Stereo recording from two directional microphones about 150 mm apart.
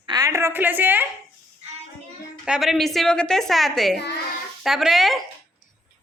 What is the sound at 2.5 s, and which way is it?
A woman's voice, centre (ahead or behind).